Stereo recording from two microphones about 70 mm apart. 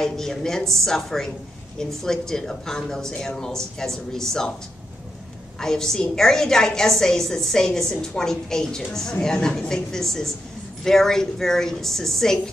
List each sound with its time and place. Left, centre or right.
0.0 s a woman's voice: centre
5.6 s a woman's voice: centre